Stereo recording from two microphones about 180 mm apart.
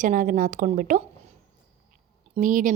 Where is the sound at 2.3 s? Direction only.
45° right (ahead or behind).